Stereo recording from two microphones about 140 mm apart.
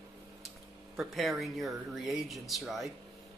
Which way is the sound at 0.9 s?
Centre (ahead or behind).